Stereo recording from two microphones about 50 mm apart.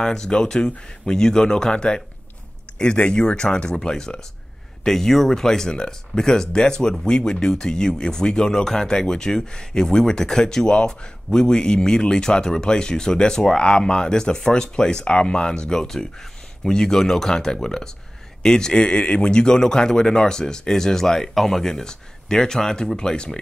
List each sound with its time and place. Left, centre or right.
0.0 s speech: centre